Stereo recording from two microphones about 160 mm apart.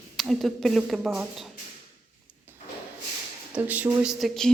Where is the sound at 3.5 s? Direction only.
10° right (ahead or behind).